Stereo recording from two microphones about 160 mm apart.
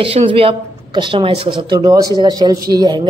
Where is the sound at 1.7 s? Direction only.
20° right (ahead or behind).